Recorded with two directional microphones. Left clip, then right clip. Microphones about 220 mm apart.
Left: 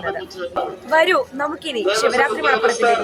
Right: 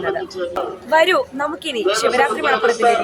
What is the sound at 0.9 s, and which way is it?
Speech, 5° left (ahead or behind).